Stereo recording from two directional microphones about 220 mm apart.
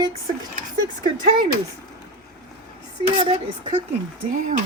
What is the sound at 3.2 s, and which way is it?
Speech, 25° right (ahead or behind).